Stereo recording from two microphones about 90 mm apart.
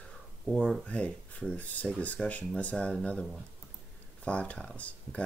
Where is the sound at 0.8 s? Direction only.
15° left (ahead or behind).